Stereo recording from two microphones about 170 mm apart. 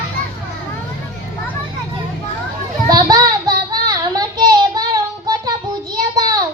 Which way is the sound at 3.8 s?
25° right (ahead or behind).